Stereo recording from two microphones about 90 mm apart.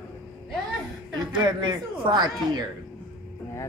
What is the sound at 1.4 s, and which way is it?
A man's voice, 55° right (ahead or behind).